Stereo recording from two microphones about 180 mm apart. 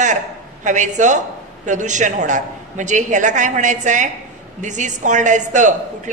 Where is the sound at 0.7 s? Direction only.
45° right (ahead or behind).